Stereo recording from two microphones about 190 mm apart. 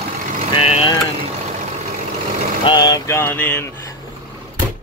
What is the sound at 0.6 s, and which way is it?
Speech, 30° left (ahead or behind).